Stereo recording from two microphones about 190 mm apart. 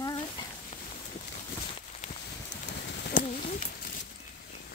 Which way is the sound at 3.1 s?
45° left (ahead or behind).